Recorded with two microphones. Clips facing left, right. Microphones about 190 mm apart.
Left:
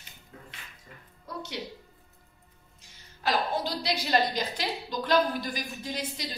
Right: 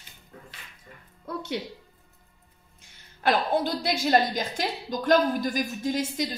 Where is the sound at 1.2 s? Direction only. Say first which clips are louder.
Right 7 dB; 55° right (ahead or behind).